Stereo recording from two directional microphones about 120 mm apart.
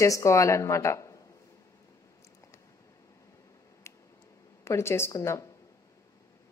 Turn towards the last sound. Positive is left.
turn(degrees=25)  # may be behind; listen again after turning